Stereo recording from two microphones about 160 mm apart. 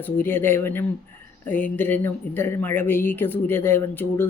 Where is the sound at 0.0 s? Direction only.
15° left (ahead or behind).